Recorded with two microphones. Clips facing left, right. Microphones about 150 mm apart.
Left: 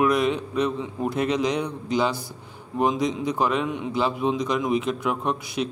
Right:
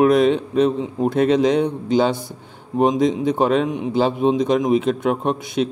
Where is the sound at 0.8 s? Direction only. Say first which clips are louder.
Right 7 dB; 25° right (ahead or behind).